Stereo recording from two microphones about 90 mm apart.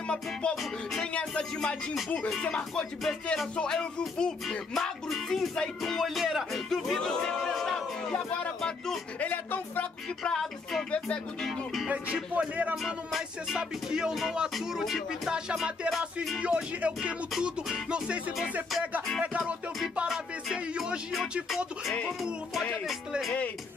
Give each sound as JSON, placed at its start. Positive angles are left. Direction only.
{"t": 0.1, "sound": "music", "side_deg": 10}
{"t": 2.0, "sound": "speech", "side_deg": 10}
{"t": 9.2, "sound": "speech", "side_deg": 20}
{"t": 10.3, "sound": "speech", "side_deg": 5}
{"t": 11.9, "sound": "music", "side_deg": -15}
{"t": 12.7, "sound": "speech", "side_deg": 0}
{"t": 16.3, "sound": "music", "side_deg": -10}
{"t": 19.2, "sound": "music", "side_deg": -15}
{"t": 20.5, "sound": "speech", "side_deg": -5}